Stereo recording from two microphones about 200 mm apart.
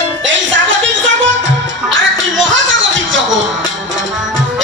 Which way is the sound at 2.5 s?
70° right (ahead or behind).